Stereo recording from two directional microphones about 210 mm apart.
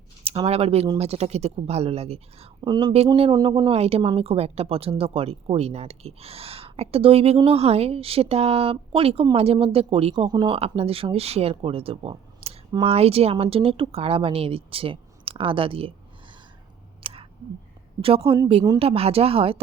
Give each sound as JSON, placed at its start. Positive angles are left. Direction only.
{"t": 0.3, "sound": "speech", "side_deg": -30}
{"t": 17.0, "sound": "a sound", "side_deg": -25}
{"t": 18.0, "sound": "speech", "side_deg": -25}